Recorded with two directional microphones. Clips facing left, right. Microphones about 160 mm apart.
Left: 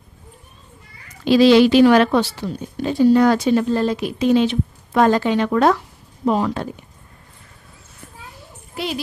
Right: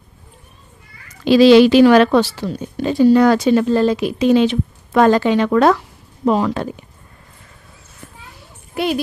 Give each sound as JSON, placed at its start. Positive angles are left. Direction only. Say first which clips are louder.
{"t": 1.2, "sound": "a woman's voice", "louder": "right 3 dB", "side_deg": -90}
{"t": 8.7, "sound": "a woman's voice", "louder": "right 7 dB", "side_deg": -55}